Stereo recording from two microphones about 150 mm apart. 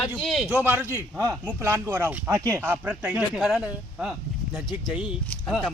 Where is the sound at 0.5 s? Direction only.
15° right (ahead or behind).